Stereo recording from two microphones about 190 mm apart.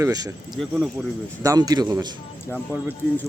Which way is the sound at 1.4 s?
20° right (ahead or behind).